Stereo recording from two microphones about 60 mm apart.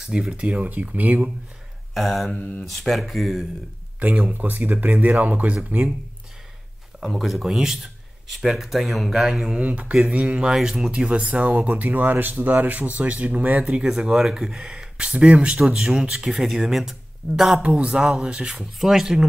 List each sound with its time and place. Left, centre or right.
0.0 s speech: centre; by 1.3 s right
2.0 s speech: centre
2.3 s speech: left
2.6 s speech: centre
4.0 s speech: right
7.0 s speech: centre
9.6 s speech: right; by 16.9 s centre
17.2 s speech: left
17.6 s speech: centre